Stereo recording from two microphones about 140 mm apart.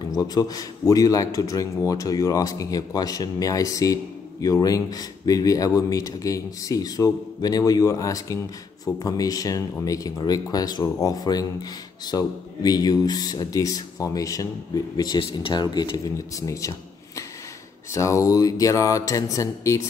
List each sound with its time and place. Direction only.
0.1 s a man's voice: 25° left (ahead or behind)
17.9 s a man's voice: 20° left (ahead or behind)